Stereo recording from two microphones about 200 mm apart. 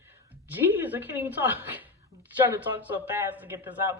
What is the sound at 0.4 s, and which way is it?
A woman's voice, 10° right (ahead or behind).